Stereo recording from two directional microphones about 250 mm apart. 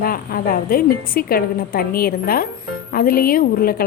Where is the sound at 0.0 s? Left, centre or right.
Left.